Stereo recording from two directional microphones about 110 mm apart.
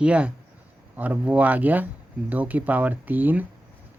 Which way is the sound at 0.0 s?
10° right (ahead or behind).